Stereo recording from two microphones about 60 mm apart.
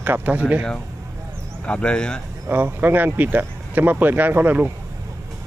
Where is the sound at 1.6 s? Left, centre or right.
Centre.